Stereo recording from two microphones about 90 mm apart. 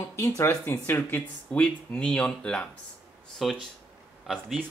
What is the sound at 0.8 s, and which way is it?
Speech, 20° left (ahead or behind).